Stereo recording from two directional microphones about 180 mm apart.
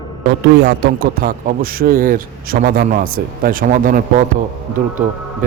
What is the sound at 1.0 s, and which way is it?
A man's voice, 55° right (ahead or behind).